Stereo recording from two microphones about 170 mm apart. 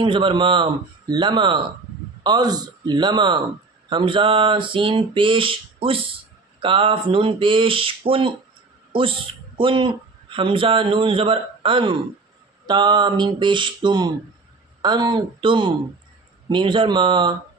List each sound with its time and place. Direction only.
0.0 s speech: 30° right (ahead or behind)
3.9 s a sound: 30° right (ahead or behind)
9.6 s a man's voice: 30° right (ahead or behind)